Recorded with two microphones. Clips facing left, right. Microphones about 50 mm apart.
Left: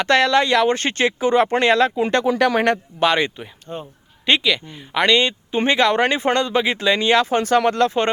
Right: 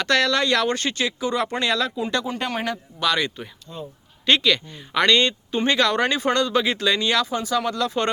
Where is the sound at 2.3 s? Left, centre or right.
Left.